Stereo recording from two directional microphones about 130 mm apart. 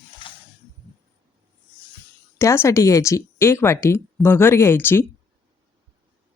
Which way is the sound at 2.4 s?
25° left (ahead or behind).